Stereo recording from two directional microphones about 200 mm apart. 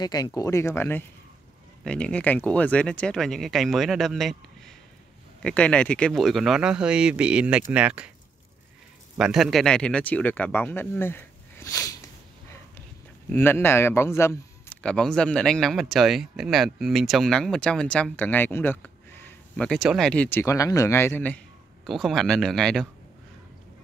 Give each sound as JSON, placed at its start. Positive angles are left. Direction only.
{"t": 0.0, "sound": "a man's voice", "side_deg": 20}
{"t": 5.4, "sound": "a man's voice", "side_deg": 5}
{"t": 9.1, "sound": "speech", "side_deg": 0}
{"t": 13.3, "sound": "a man's voice", "side_deg": 10}